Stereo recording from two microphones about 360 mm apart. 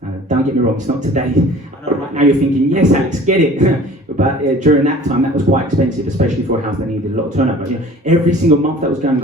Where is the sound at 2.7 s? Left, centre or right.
Centre.